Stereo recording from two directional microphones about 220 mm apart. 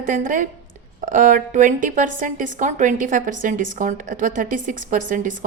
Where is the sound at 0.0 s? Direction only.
35° right (ahead or behind).